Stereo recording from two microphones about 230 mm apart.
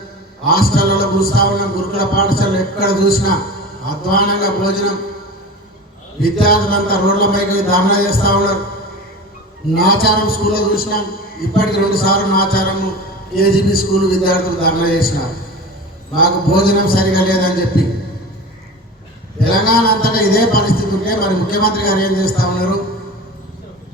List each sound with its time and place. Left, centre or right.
0.4 s music: left
6.2 s music: left
9.7 s music: left
19.5 s music: left